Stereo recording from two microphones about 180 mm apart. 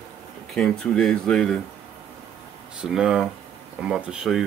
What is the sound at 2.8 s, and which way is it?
Speech, 5° right (ahead or behind).